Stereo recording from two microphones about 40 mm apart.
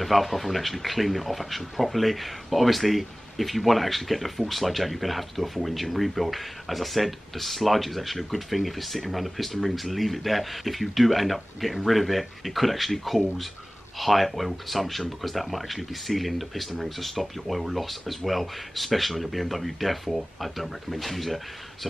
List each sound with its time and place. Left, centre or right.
0.0 s speech: centre